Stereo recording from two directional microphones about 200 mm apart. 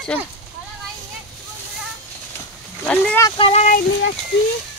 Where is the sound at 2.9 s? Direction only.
5° left (ahead or behind).